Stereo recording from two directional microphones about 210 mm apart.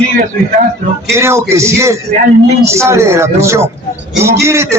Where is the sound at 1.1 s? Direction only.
15° right (ahead or behind).